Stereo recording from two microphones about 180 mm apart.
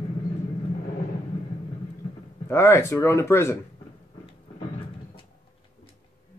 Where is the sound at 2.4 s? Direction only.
15° left (ahead or behind).